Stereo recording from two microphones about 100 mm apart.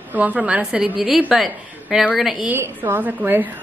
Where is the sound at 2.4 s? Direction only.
20° right (ahead or behind).